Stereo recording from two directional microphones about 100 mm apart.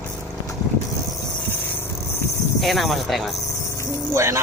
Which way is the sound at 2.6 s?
Centre (ahead or behind).